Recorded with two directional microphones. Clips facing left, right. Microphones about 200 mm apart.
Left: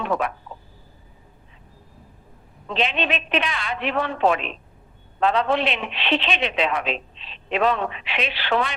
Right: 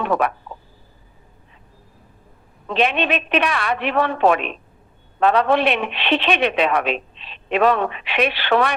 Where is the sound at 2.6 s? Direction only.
65° right (ahead or behind).